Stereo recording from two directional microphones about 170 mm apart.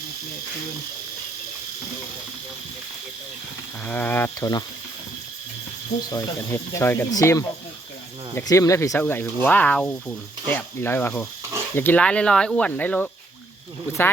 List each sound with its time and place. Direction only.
3.8 s speech: 10° left (ahead or behind)
6.1 s speech: 20° left (ahead or behind)